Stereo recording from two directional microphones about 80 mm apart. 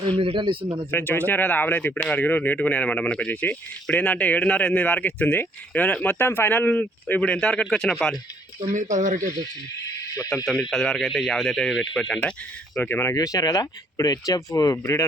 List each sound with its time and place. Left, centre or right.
0.1 s speech: right
0.9 s speech: left; by 8.2 s centre
9.2 s speech: right
10.2 s speech: centre
12.8 s speech: left
13.1 s speech: left